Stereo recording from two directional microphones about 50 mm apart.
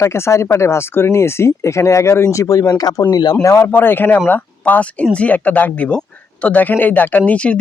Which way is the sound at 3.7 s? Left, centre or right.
Left.